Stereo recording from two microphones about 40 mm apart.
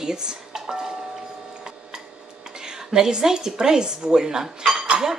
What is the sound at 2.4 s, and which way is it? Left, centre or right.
A woman's voice, centre.